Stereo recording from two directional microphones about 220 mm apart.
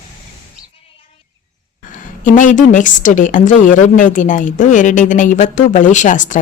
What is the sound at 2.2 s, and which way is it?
A woman's voice, 35° left (ahead or behind).